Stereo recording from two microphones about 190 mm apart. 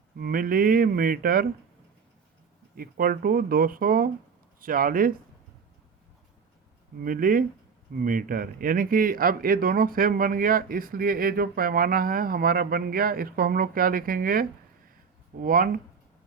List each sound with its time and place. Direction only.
0.2 s speech: 50° right (ahead or behind)
2.7 s speech: 50° right (ahead or behind)
7.0 s speech: 45° right (ahead or behind)